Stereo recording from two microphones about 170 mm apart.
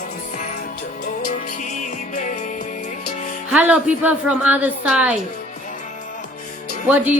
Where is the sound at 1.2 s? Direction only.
50° left (ahead or behind).